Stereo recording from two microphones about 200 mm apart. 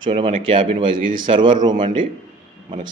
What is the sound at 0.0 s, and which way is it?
A man's voice, 25° right (ahead or behind).